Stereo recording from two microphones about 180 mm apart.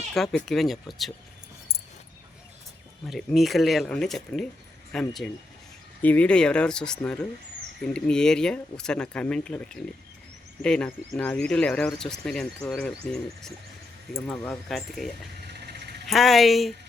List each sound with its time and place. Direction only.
0.1 s speech: 5° left (ahead or behind)
3.1 s speech: centre (ahead or behind)